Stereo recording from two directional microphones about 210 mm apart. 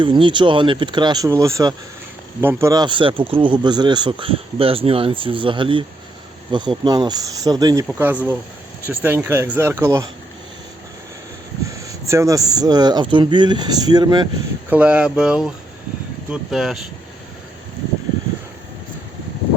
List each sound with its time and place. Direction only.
0.0 s speech: 25° right (ahead or behind)
11.7 s speech: 15° right (ahead or behind)
14.7 s speech: 5° right (ahead or behind)